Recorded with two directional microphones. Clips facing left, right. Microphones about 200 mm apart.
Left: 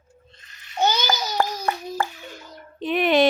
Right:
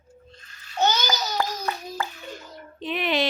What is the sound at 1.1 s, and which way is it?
Babbling, 50° left (ahead or behind).